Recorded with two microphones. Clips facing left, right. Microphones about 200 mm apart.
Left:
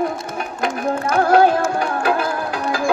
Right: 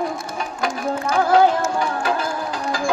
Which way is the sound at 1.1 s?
60° left (ahead or behind).